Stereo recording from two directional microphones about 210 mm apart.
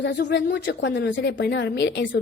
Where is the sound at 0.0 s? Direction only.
55° left (ahead or behind).